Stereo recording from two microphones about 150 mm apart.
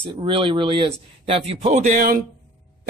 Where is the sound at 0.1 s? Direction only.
35° right (ahead or behind).